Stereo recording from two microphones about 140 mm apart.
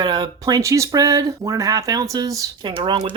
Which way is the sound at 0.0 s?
30° right (ahead or behind).